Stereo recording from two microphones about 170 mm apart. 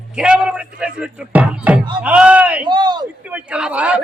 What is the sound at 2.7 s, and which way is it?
Speech, 25° right (ahead or behind).